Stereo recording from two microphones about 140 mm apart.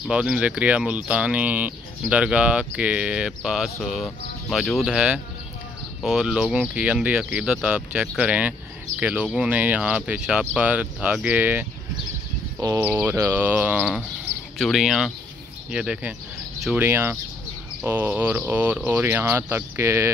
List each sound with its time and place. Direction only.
0.1 s speech: 5° right (ahead or behind)
12.5 s speech: 25° right (ahead or behind)